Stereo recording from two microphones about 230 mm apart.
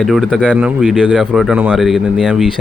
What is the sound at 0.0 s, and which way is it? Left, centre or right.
Speech, centre.